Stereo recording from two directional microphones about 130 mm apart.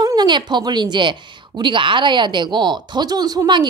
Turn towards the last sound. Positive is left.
turn(degrees=-35)  # may be behind; listen again after turning